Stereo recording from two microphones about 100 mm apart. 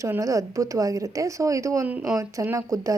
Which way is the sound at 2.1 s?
30° right (ahead or behind).